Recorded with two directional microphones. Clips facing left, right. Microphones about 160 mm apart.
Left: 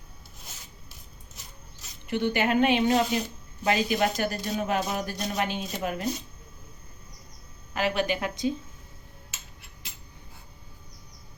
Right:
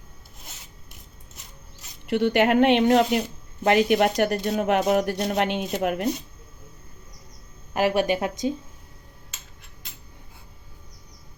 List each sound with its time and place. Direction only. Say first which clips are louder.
2.0 s speech: right 6 dB; 70° right (ahead or behind)
7.7 s speech: right 5 dB; 45° right (ahead or behind)